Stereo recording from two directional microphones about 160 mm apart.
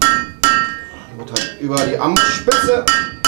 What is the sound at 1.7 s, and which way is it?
Cowbell, 15° right (ahead or behind).